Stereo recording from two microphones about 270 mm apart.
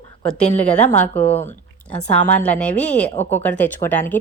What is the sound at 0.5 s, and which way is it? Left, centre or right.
A woman's voice, centre.